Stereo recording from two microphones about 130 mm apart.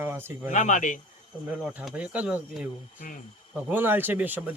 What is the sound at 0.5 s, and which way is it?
Speech, 70° left (ahead or behind).